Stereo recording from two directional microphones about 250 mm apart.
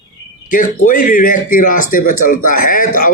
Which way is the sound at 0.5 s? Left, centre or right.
Left.